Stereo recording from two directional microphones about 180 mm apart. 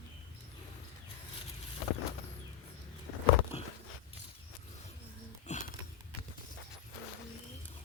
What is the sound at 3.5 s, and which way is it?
Biting, 35° left (ahead or behind).